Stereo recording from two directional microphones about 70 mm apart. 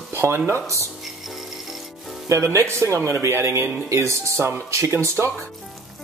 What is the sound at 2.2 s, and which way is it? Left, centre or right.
Speech, right.